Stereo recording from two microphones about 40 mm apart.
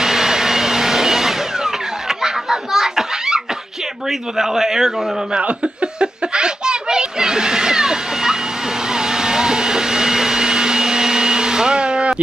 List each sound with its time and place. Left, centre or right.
0.0 s vehicle: centre
4.1 s a man's voice: centre
5.4 s a sound: right; by 8.4 s centre
8.8 s vacuum cleaner: centre